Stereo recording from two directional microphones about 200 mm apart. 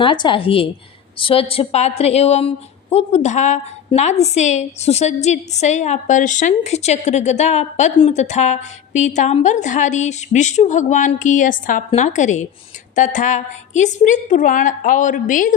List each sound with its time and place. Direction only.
0.0 s a woman's voice: 25° left (ahead or behind); by 15.5 s 40° left (ahead or behind)